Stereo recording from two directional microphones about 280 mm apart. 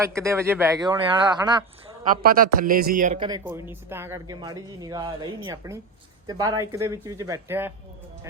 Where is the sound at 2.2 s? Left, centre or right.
Right.